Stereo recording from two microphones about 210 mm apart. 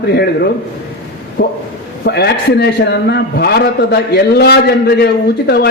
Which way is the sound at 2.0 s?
50° left (ahead or behind).